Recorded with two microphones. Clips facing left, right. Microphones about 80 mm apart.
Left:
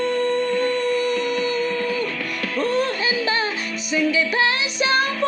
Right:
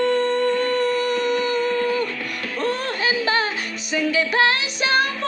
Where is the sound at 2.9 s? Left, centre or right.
Right.